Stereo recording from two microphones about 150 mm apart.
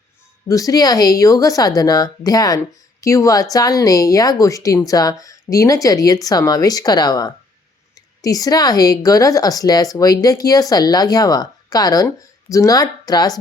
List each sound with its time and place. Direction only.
0.4 s a woman's voice: 20° left (ahead or behind)